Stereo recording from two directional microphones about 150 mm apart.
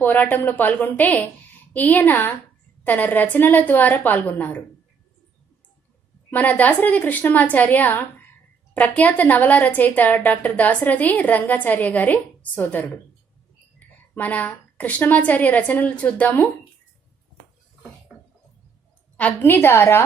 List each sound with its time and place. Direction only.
0.0 s a woman's voice: 10° left (ahead or behind)
6.3 s a woman's voice: 10° left (ahead or behind)
19.1 s a woman's voice: 10° left (ahead or behind)